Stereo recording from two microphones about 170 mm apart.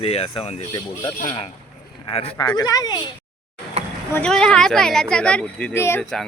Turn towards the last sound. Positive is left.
turn(degrees=15)  # may be behind; listen again after turning